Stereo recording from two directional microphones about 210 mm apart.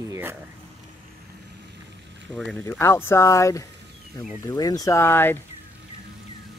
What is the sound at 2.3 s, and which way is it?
Speech, 5° left (ahead or behind).